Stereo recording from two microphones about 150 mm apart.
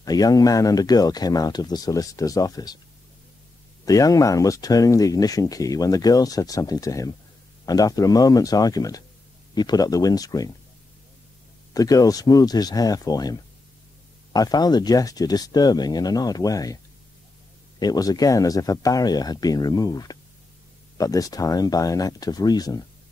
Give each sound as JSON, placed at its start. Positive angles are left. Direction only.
{"t": 0.0, "sound": "speech", "side_deg": 25}
{"t": 3.8, "sound": "speech", "side_deg": 25}
{"t": 11.7, "sound": "speech", "side_deg": 25}
{"t": 17.7, "sound": "speech", "side_deg": 25}